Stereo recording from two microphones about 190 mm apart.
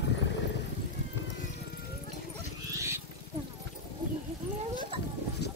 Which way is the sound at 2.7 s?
15° right (ahead or behind).